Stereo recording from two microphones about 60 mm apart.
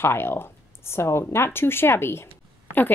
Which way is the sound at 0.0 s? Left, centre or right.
Left.